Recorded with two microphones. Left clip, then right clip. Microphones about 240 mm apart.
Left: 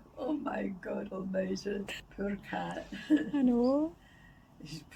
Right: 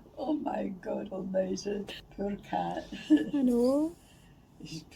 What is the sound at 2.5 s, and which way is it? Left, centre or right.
Speech, left.